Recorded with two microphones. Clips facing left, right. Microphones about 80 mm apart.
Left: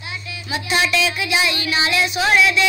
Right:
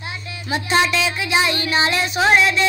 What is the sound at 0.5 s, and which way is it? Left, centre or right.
Music, right.